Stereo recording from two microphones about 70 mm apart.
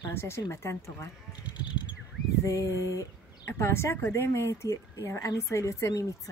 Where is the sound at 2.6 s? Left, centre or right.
Right.